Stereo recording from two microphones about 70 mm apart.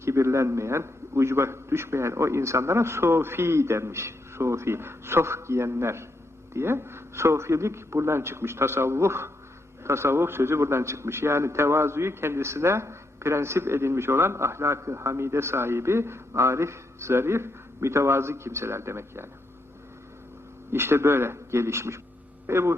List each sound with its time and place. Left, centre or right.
0.0 s a man's voice: right
20.7 s a man's voice: right